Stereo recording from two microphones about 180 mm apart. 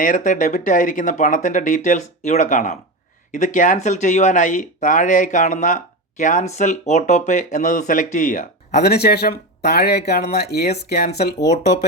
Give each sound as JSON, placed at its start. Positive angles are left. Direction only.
{"t": 0.0, "sound": "speech", "side_deg": 45}
{"t": 8.7, "sound": "speech", "side_deg": 60}